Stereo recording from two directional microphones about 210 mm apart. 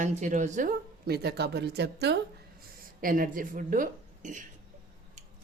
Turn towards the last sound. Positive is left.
turn(degrees=-35)  # may be behind; listen again after turning